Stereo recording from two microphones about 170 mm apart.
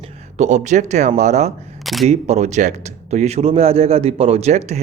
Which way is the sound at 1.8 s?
Centre (ahead or behind).